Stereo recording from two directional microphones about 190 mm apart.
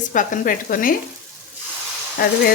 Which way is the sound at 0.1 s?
45° left (ahead or behind).